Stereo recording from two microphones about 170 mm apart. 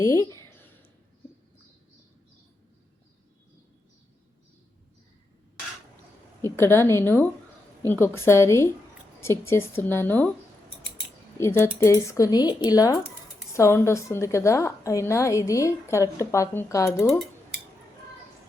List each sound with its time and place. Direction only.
0.0 s a woman's voice: 20° left (ahead or behind)
6.4 s a woman's voice: 15° left (ahead or behind)
11.3 s a woman's voice: 15° left (ahead or behind)